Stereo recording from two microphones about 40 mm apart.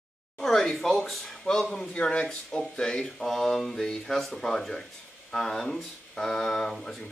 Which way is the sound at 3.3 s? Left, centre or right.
Centre.